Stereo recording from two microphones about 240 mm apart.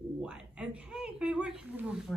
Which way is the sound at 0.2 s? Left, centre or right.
Centre.